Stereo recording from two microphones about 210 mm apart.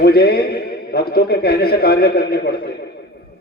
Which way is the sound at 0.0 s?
50° left (ahead or behind).